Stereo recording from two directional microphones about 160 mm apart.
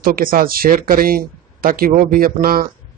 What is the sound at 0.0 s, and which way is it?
Speech, 65° right (ahead or behind).